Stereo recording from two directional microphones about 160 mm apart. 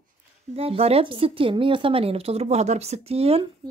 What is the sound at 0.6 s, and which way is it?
Speech, 40° right (ahead or behind).